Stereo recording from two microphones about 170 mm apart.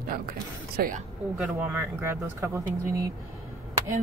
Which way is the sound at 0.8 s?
60° right (ahead or behind).